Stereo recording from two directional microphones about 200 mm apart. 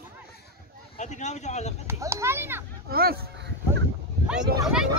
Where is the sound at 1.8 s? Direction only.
10° right (ahead or behind).